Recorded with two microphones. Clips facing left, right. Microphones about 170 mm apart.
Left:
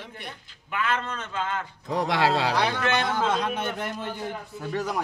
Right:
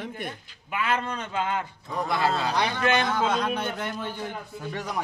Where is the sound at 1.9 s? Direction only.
90° left.